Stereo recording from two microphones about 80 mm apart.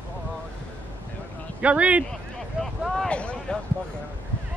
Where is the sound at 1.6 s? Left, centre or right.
Centre.